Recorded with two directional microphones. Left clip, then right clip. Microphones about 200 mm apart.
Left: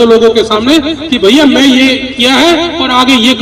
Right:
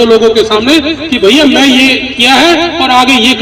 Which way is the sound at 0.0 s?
10° right (ahead or behind).